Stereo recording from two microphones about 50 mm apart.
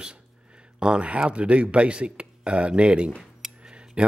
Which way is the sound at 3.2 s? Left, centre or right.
Centre.